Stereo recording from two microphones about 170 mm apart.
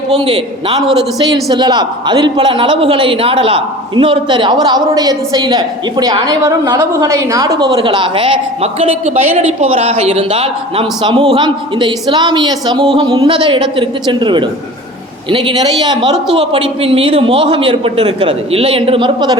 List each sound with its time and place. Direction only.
0.2 s a woman's voice: 35° right (ahead or behind)